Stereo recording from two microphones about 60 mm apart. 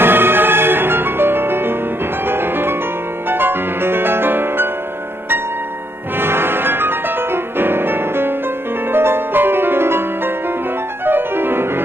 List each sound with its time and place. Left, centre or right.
0.0 s music: right
6.1 s music: right